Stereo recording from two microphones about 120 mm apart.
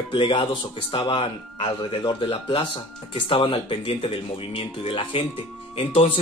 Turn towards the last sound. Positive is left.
turn(degrees=50)  # may be behind; listen again after turning